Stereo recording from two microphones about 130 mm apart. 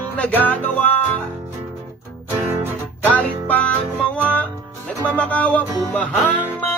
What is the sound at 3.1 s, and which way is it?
Music, 10° left (ahead or behind).